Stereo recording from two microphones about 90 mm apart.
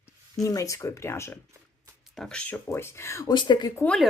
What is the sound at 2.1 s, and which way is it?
Speech, 5° left (ahead or behind).